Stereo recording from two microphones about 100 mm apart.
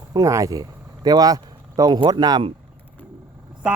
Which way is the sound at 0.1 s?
35° right (ahead or behind).